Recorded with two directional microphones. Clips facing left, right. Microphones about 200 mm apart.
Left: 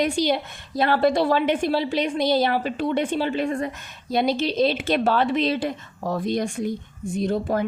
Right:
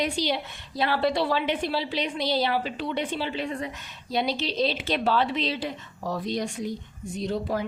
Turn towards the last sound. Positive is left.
turn(degrees=50)  # may be behind; listen again after turning